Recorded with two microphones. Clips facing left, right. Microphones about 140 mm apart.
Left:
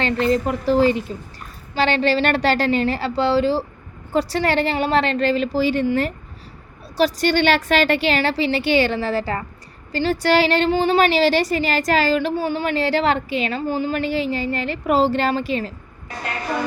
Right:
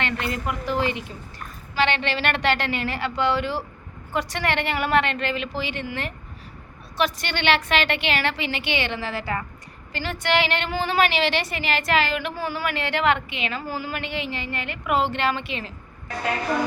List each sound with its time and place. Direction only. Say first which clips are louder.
0.0 s a woman's voice: left 8 dB; 35° left (ahead or behind)
13.6 s a woman's voice: left 8 dB; 25° left (ahead or behind)